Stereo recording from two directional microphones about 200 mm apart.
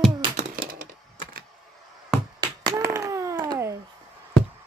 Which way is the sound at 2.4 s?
20° right (ahead or behind).